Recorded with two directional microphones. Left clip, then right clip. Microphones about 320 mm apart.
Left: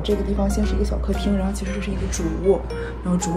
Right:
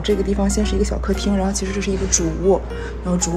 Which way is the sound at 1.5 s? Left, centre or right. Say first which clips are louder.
Right 6 dB; centre.